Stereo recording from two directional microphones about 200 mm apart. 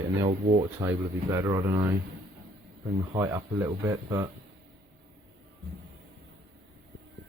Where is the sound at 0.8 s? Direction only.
15° right (ahead or behind).